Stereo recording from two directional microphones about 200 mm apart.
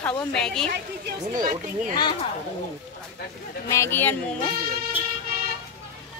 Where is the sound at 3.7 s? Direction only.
10° left (ahead or behind).